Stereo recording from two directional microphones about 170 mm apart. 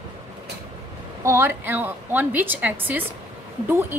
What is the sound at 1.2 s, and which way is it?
A woman's voice, 15° right (ahead or behind).